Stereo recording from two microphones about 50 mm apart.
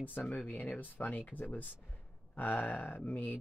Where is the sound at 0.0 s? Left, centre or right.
Left.